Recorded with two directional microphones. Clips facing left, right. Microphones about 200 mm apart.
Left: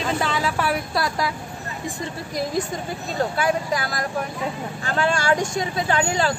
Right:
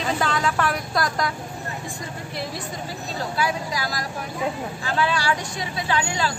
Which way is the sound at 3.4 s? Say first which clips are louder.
Even; 50° left (ahead or behind).